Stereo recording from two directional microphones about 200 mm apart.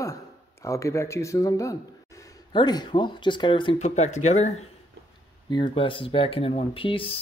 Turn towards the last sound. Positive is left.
turn(degrees=25)  # may be behind; listen again after turning